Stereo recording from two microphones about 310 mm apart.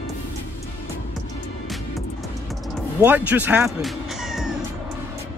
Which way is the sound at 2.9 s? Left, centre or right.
Centre.